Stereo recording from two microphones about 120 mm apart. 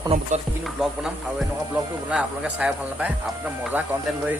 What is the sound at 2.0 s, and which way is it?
Speech, 10° right (ahead or behind).